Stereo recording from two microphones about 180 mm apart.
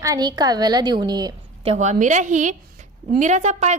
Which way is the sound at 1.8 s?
45° right (ahead or behind).